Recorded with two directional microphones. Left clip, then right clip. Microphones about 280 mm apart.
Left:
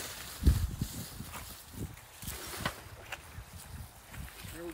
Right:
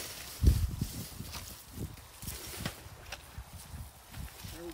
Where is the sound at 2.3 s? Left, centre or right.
Centre.